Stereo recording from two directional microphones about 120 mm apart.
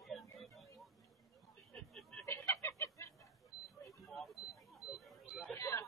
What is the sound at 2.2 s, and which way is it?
Chicken, 20° left (ahead or behind).